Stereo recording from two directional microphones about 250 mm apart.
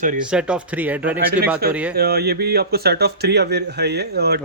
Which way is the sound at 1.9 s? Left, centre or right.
Right.